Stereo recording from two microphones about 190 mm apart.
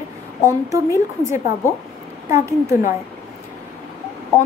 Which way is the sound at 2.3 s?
15° right (ahead or behind).